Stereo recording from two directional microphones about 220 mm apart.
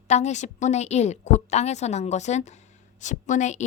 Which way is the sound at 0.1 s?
30° left (ahead or behind).